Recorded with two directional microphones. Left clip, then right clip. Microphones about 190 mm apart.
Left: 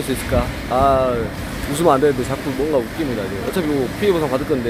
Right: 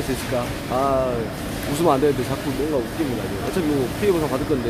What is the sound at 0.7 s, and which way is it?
Speech, 15° left (ahead or behind).